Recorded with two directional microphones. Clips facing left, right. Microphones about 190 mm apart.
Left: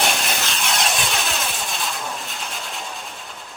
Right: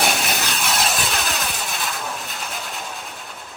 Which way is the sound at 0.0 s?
Centre (ahead or behind).